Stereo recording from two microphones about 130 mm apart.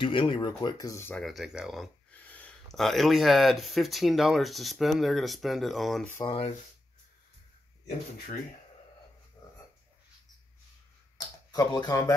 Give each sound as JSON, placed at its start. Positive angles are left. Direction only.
{"t": 0.0, "sound": "speech", "side_deg": 40}
{"t": 1.2, "sound": "speech", "side_deg": 0}
{"t": 2.0, "sound": "a sound", "side_deg": 10}
{"t": 2.7, "sound": "speech", "side_deg": 0}
{"t": 6.2, "sound": "speech", "side_deg": 45}
{"t": 11.1, "sound": "speech", "side_deg": 30}